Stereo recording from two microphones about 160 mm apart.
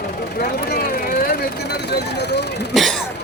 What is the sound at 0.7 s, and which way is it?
Vehicle, 65° left (ahead or behind).